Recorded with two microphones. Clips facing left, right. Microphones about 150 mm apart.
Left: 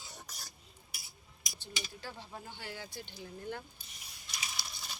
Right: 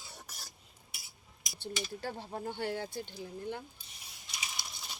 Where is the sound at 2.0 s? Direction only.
55° right (ahead or behind).